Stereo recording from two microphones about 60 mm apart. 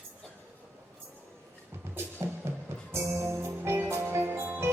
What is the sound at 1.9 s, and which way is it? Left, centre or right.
Music, right.